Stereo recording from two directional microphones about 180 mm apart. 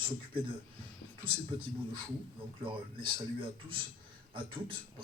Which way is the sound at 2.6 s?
30° right (ahead or behind).